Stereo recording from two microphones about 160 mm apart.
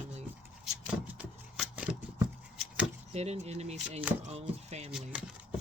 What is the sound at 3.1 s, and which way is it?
Speech, 45° right (ahead or behind).